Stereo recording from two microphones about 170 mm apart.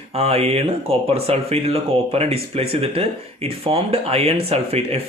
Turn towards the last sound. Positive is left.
turn(degrees=-35)  # may be behind; listen again after turning